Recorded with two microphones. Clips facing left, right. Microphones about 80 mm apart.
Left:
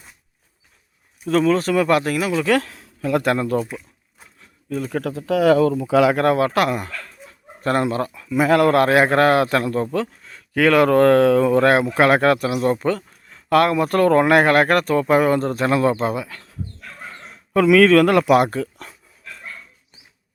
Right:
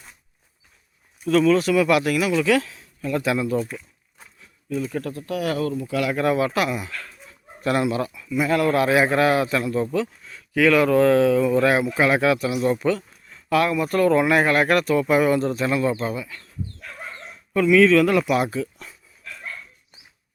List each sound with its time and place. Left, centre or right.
1.3 s speech: left
3.2 s speech: left
3.6 s a sound: centre
4.4 s a sound: left
5.8 s speech: left
6.2 s speech: left
8.4 s speech: left
13.3 s speech: left